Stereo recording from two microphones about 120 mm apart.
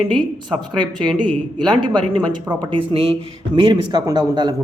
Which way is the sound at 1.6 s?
40° right (ahead or behind).